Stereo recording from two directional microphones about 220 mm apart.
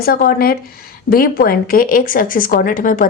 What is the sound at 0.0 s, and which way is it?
A woman's voice, 45° left (ahead or behind).